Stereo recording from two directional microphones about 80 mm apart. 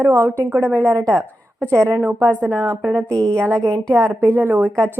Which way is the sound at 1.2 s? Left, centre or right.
Centre.